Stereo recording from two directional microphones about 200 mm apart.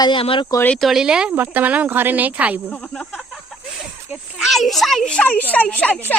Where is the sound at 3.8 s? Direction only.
Centre (ahead or behind).